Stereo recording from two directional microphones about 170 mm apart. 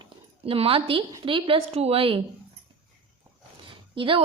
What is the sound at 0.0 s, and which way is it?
A woman's voice, 35° right (ahead or behind).